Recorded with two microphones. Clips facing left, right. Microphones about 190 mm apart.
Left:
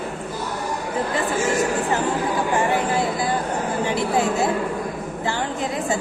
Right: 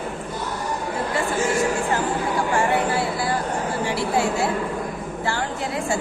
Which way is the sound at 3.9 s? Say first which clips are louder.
Left 1 dB; 20° left (ahead or behind).